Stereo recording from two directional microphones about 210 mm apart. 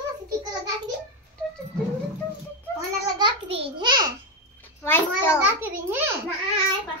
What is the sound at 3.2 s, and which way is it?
Speech, 25° right (ahead or behind).